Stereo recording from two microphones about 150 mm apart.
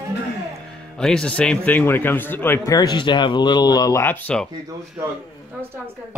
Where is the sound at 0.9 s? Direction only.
5° left (ahead or behind); by 4.0 s 25° left (ahead or behind).